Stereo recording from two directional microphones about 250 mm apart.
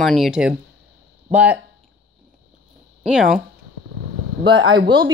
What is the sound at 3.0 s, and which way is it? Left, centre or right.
Speech, centre.